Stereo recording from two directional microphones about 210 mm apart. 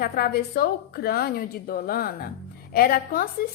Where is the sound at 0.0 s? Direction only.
45° left (ahead or behind).